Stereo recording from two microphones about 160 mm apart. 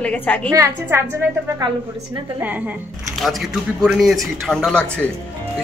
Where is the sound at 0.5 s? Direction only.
20° right (ahead or behind); by 5.1 s 5° left (ahead or behind).